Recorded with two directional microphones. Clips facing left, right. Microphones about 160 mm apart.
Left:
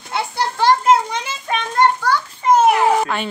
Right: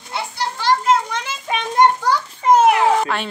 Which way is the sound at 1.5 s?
5° right (ahead or behind).